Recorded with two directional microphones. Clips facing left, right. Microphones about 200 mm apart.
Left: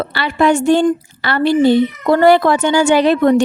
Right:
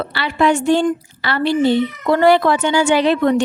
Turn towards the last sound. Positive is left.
turn(degrees=45)  # may be behind; listen again after turning